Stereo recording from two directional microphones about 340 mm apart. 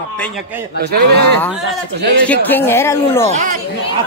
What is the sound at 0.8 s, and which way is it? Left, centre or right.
Speech, right.